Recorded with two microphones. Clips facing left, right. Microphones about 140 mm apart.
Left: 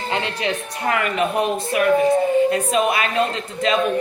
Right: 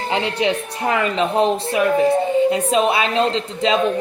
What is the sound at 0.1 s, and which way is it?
Speech, 25° right (ahead or behind).